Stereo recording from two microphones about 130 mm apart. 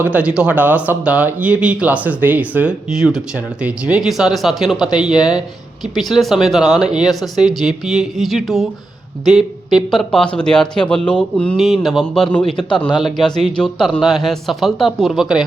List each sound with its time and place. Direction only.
0.0 s a man's voice: 10° right (ahead or behind)
9.7 s a man's voice: 5° left (ahead or behind)
11.5 s a man's voice: centre (ahead or behind)
12.9 s speech: 35° left (ahead or behind)
13.1 s a man's voice: 5° left (ahead or behind)